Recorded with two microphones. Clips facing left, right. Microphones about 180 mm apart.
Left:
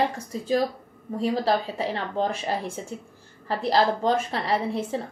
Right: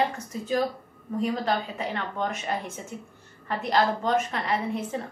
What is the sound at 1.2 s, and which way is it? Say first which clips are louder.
A woman's voice: left 3 dB; 35° left (ahead or behind).